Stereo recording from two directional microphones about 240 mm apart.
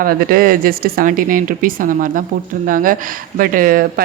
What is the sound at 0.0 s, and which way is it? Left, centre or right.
Speech, right.